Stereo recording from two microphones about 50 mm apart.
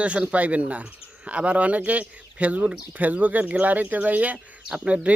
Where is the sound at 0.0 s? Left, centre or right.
Right.